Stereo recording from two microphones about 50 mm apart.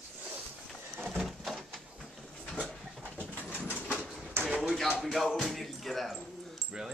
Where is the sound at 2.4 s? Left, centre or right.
Left.